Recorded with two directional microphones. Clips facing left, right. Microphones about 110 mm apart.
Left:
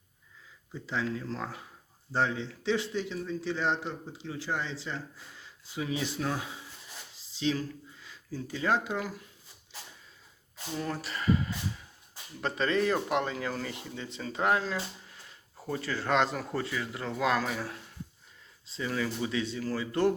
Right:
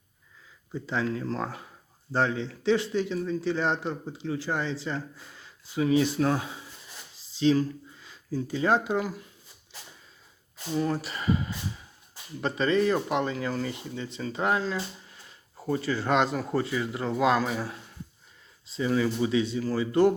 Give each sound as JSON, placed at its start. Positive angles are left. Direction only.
{"t": 0.7, "sound": "speech", "side_deg": -50}
{"t": 2.1, "sound": "a man's voice", "side_deg": -60}
{"t": 7.3, "sound": "speech", "side_deg": -40}
{"t": 8.5, "sound": "speech", "side_deg": -30}
{"t": 10.8, "sound": "speech", "side_deg": -10}
{"t": 12.4, "sound": "speech", "side_deg": -5}
{"t": 15.6, "sound": "speech", "side_deg": -10}
{"t": 16.6, "sound": "speech", "side_deg": -20}
{"t": 18.8, "sound": "speech", "side_deg": -20}